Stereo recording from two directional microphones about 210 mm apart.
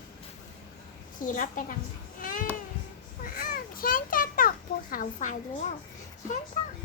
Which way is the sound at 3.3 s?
45° left (ahead or behind).